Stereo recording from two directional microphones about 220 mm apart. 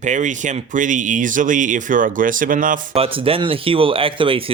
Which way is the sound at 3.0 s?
25° right (ahead or behind).